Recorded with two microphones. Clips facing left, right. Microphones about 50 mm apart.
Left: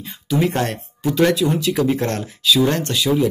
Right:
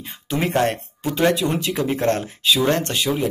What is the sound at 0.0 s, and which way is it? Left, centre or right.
Speech, right.